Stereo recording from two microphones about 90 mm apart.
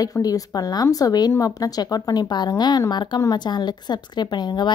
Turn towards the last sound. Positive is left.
turn(degrees=50)  # may be behind; listen again after turning